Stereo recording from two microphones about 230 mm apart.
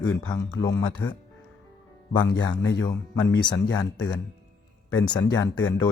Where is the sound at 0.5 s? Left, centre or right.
Centre.